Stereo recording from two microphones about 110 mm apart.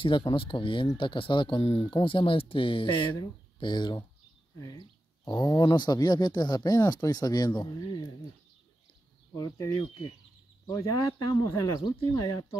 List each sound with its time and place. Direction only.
0.0 s speech: 50° left (ahead or behind)
1.6 s speech: 65° left (ahead or behind)
2.0 s speech: 55° left (ahead or behind)
9.3 s speech: 30° left (ahead or behind)